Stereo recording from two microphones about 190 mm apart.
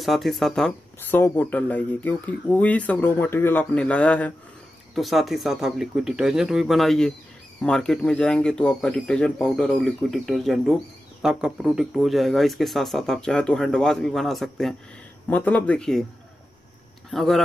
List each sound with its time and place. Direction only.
0.0 s speech: centre (ahead or behind)
17.1 s speech: centre (ahead or behind)